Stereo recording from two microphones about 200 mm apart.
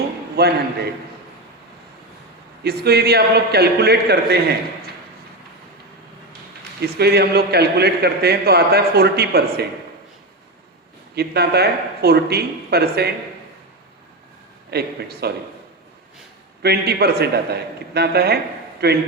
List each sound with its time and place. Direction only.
0.4 s a man's voice: 50° right (ahead or behind)
2.6 s a man's voice: 50° right (ahead or behind)
6.8 s a man's voice: 55° right (ahead or behind)
11.1 s a man's voice: 55° right (ahead or behind)
14.7 s a man's voice: 55° right (ahead or behind)
16.6 s a man's voice: 50° right (ahead or behind)